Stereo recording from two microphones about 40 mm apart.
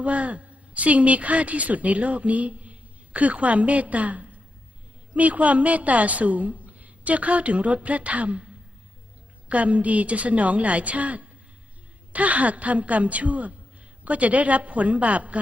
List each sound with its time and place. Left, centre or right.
0.0 s a woman's voice: right
9.5 s a woman's voice: right